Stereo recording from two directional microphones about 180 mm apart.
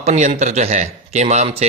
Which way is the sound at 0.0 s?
40° right (ahead or behind).